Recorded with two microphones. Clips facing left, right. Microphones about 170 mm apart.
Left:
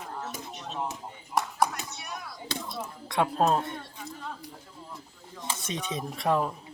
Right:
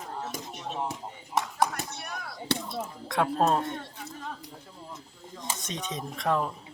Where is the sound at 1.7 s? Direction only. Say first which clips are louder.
Right 2 dB; 55° right (ahead or behind).